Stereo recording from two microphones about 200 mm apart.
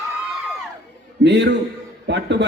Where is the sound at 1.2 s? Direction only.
60° right (ahead or behind).